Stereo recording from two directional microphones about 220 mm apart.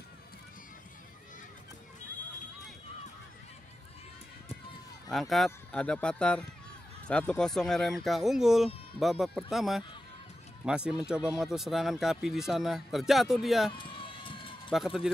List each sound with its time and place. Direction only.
5.1 s speech: centre (ahead or behind)
13.7 s run: 25° left (ahead or behind)
14.7 s speech: centre (ahead or behind)